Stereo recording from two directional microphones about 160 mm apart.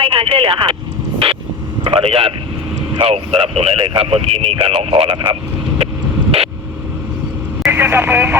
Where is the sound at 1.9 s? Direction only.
35° right (ahead or behind).